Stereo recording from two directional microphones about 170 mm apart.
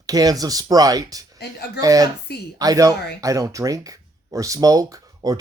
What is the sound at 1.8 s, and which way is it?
Speech, 20° right (ahead or behind).